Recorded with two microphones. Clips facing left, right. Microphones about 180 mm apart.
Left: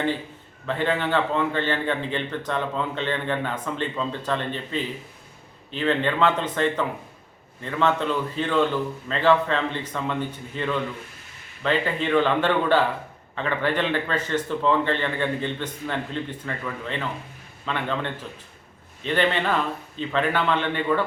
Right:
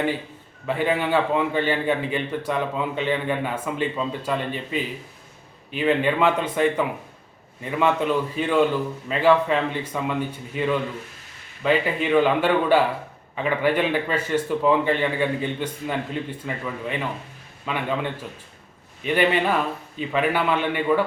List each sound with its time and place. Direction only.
0.7 s a man's voice: 10° right (ahead or behind)